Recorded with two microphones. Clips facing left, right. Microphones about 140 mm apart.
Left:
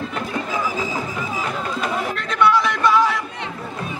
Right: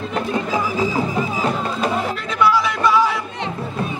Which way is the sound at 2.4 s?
Centre (ahead or behind).